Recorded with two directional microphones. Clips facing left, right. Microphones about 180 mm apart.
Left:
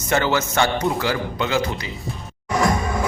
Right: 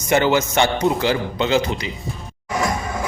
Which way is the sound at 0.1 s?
15° right (ahead or behind).